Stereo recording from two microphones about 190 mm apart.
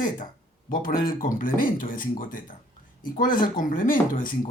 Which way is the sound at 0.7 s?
45° left (ahead or behind).